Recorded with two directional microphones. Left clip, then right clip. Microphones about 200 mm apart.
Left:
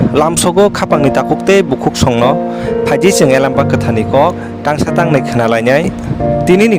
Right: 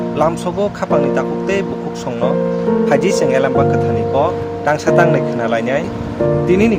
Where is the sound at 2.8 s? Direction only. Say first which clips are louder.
Left 6 dB; 55° left (ahead or behind).